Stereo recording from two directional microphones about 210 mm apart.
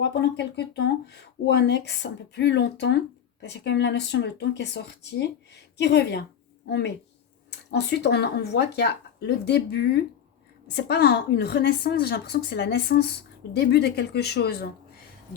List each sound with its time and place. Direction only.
0.0 s a woman's voice: 55° left (ahead or behind)